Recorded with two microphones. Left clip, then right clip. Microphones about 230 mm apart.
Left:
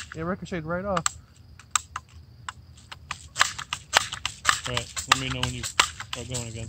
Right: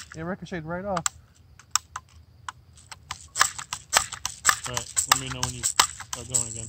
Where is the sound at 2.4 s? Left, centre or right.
Right.